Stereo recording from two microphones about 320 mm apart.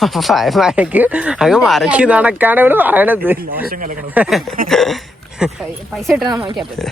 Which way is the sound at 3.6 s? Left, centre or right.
Right.